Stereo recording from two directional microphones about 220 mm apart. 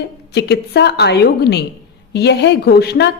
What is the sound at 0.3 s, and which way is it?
Speech, 50° left (ahead or behind).